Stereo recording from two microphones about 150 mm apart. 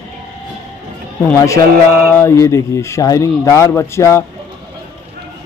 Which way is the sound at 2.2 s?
20° left (ahead or behind).